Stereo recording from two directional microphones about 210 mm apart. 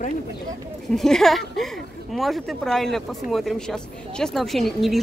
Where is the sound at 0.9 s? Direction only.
Centre (ahead or behind).